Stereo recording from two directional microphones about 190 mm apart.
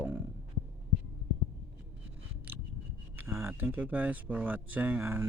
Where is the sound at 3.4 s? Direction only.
10° right (ahead or behind).